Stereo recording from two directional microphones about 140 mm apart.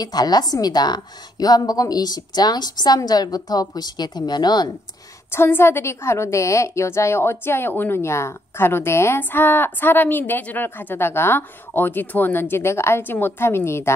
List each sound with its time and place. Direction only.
0.0 s a woman's voice: 30° left (ahead or behind)
5.3 s a woman's voice: 15° left (ahead or behind)